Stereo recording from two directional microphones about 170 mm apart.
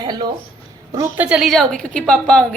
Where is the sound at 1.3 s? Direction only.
Centre (ahead or behind).